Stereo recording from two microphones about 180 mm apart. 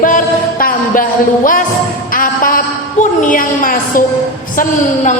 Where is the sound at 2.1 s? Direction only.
50° left (ahead or behind).